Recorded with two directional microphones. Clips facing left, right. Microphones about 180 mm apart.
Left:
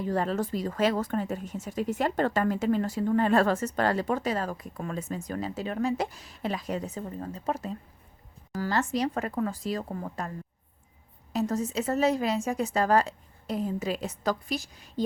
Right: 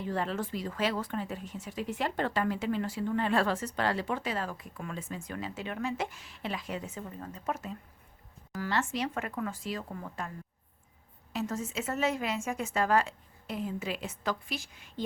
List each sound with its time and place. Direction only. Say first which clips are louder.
0.0 s speech: left 5 dB; 40° left (ahead or behind)